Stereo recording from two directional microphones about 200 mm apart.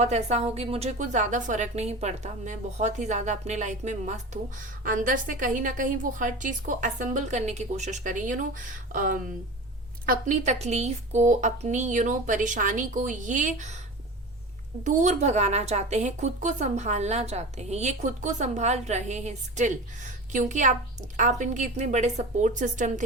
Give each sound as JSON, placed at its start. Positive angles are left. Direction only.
{"t": 0.0, "sound": "a woman's voice", "side_deg": -35}
{"t": 14.8, "sound": "a woman's voice", "side_deg": -35}